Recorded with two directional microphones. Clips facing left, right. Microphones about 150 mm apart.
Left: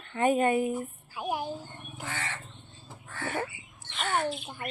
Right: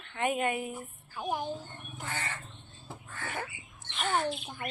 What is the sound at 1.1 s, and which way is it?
Speech, 10° left (ahead or behind).